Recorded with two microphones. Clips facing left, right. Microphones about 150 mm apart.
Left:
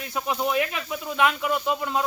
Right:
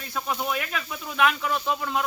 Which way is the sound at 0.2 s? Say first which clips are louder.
Left 4 dB; 15° left (ahead or behind).